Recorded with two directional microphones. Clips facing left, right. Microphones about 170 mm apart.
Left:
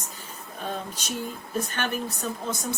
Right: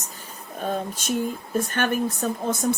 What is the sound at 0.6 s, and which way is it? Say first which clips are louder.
Speech: right 6 dB; 50° right (ahead or behind).